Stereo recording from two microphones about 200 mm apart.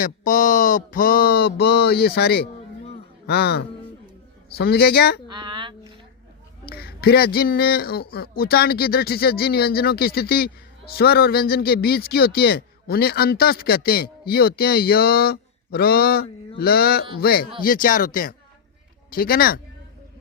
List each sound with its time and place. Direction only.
0.0 s a man's voice: 40° left (ahead or behind)
5.3 s a sound: 25° right (ahead or behind)
6.7 s a man's voice: 50° left (ahead or behind)